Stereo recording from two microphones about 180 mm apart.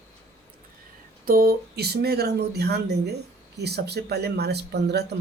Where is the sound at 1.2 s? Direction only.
55° right (ahead or behind).